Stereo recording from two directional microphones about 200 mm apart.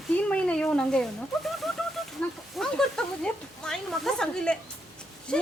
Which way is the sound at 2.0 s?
Centre (ahead or behind).